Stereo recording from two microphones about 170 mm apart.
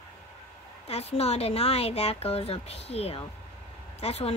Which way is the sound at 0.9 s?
35° left (ahead or behind).